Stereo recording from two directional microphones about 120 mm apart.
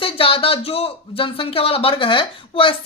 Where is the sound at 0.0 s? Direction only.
50° left (ahead or behind).